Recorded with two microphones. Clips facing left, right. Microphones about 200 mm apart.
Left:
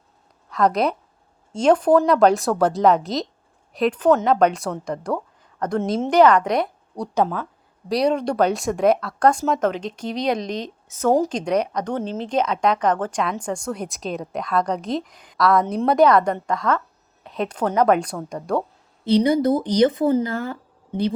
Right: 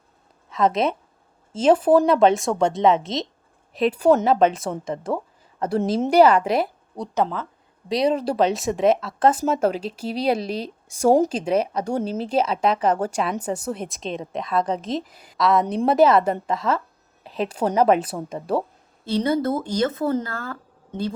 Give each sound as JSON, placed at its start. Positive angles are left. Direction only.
{"t": 0.5, "sound": "speech", "side_deg": 0}
{"t": 7.1, "sound": "speech", "side_deg": 10}
{"t": 7.9, "sound": "speech", "side_deg": 0}
{"t": 17.7, "sound": "a woman's voice", "side_deg": -30}
{"t": 18.3, "sound": "speech", "side_deg": -5}
{"t": 19.0, "sound": "speech", "side_deg": 15}